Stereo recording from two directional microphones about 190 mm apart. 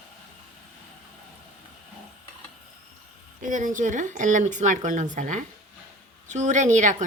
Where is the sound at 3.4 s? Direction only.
40° right (ahead or behind).